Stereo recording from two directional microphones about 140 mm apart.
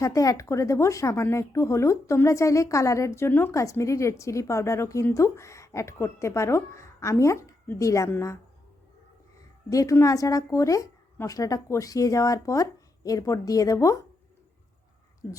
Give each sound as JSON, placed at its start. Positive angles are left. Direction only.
{"t": 0.0, "sound": "speech", "side_deg": 25}
{"t": 9.6, "sound": "speech", "side_deg": 25}